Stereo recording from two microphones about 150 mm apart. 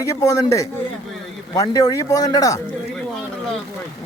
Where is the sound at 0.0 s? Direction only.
20° left (ahead or behind).